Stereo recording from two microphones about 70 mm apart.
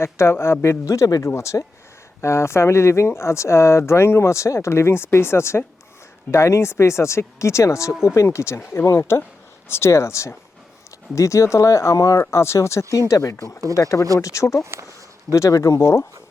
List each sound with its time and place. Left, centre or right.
0.0 s speech: left
1.2 s speech: left
12.9 s speech: left
14.6 s speech: right
15.3 s speech: left